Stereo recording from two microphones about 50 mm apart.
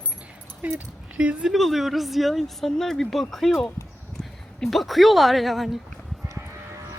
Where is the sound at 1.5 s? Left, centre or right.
Centre.